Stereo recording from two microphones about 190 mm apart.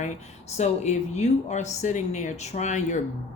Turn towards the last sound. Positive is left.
turn(degrees=40)  # may be behind; listen again after turning